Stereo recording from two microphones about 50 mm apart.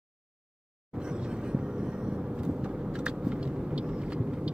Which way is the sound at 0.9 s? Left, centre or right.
Centre.